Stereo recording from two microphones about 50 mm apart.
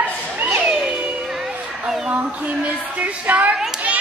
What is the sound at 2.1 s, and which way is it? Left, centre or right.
A woman's voice, right.